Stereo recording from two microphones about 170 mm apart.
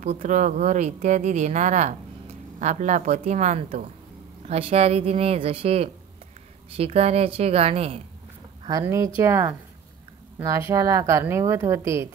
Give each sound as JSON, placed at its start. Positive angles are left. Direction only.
{"t": 0.0, "sound": "speech", "side_deg": -45}
{"t": 8.8, "sound": "a woman's voice", "side_deg": -20}
{"t": 10.7, "sound": "a woman's voice", "side_deg": -20}